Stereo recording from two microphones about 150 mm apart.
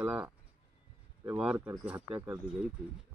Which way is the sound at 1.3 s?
10° right (ahead or behind).